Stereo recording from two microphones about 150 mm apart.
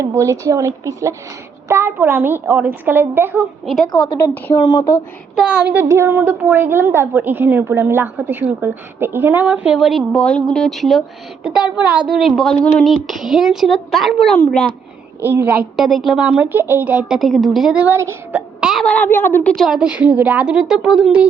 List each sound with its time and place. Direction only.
0.0 s a woman's voice: 20° right (ahead or behind)
4.2 s a woman's voice: 20° left (ahead or behind)
5.4 s a woman's voice: 10° right (ahead or behind)
15.2 s a woman's voice: 15° right (ahead or behind)